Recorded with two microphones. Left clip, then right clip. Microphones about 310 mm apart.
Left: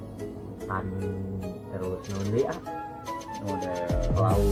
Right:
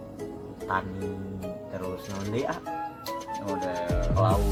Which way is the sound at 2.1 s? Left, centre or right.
Centre.